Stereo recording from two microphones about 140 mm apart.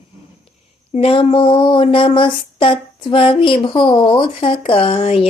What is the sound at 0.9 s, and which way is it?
Speech, 45° left (ahead or behind).